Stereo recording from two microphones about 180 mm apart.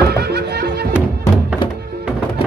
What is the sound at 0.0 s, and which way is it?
Music, 60° right (ahead or behind).